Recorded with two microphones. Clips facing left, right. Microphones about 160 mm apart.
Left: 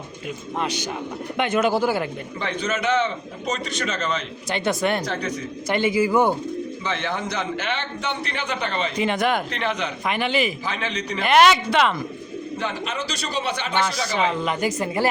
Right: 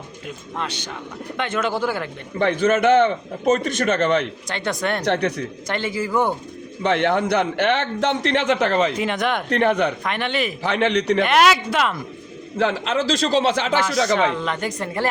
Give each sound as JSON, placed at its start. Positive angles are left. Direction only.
{"t": 0.6, "sound": "speech", "side_deg": 10}
{"t": 2.4, "sound": "a man's voice", "side_deg": -55}
{"t": 4.4, "sound": "a woman's voice", "side_deg": 5}
{"t": 5.0, "sound": "speech", "side_deg": -70}
{"t": 5.6, "sound": "speech", "side_deg": 10}
{"t": 6.8, "sound": "a man's voice", "side_deg": -60}
{"t": 8.9, "sound": "a woman's voice", "side_deg": 0}
{"t": 9.5, "sound": "a man's voice", "side_deg": -55}
{"t": 10.1, "sound": "a woman's voice", "side_deg": 5}
{"t": 10.6, "sound": "a man's voice", "side_deg": -65}
{"t": 11.2, "sound": "a woman's voice", "side_deg": 0}
{"t": 12.5, "sound": "a man's voice", "side_deg": -90}
{"t": 14.0, "sound": "speech", "side_deg": -75}
{"t": 14.3, "sound": "speech", "side_deg": 10}